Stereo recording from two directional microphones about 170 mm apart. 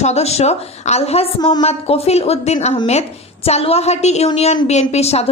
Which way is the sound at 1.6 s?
40° left (ahead or behind).